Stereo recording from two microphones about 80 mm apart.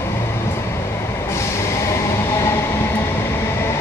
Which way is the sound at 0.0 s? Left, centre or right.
Left.